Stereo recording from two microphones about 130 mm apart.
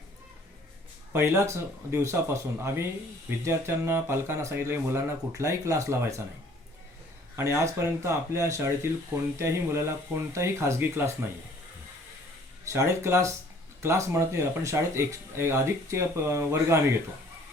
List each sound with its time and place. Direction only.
1.1 s speech: 20° right (ahead or behind)
7.3 s speech: 20° right (ahead or behind)
12.7 s speech: 20° right (ahead or behind)